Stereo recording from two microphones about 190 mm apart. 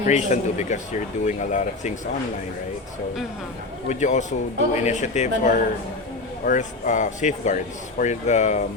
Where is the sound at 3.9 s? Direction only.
40° left (ahead or behind).